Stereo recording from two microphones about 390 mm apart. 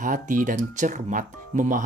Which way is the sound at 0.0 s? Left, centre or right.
Centre.